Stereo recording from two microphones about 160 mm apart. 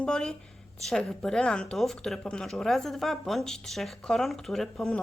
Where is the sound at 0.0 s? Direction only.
5° left (ahead or behind).